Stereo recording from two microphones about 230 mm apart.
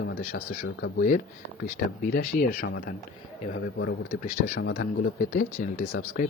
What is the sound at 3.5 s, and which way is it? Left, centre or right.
Speech, left.